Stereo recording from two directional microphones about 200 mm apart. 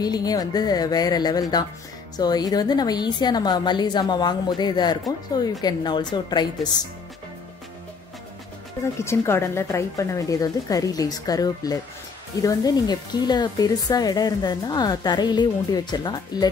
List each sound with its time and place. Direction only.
0.0 s speech: 20° left (ahead or behind)
9.0 s speech: 15° left (ahead or behind)